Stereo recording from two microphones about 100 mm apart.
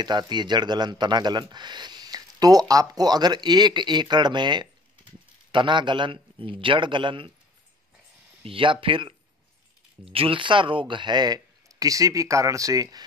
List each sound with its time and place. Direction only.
0.0 s speech: 45° right (ahead or behind)
8.5 s speech: 60° right (ahead or behind); by 13.0 s 35° right (ahead or behind)